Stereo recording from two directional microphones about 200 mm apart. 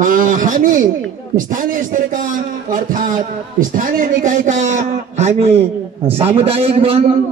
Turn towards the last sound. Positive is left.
turn(degrees=-30)  # may be behind; listen again after turning